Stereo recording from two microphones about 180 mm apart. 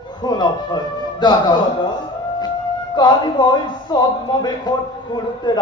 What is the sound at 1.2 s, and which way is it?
Speech, 25° left (ahead or behind).